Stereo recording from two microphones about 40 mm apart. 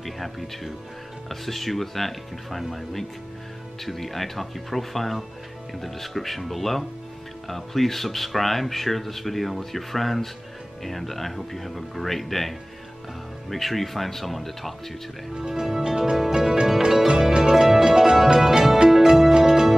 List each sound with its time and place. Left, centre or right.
1.3 s speech: centre
15.3 s speech: centre
15.8 s music: centre